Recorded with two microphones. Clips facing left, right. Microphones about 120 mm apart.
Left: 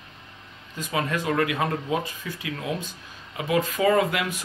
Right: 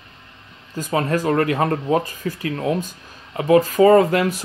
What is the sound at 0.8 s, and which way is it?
Speech, 40° right (ahead or behind).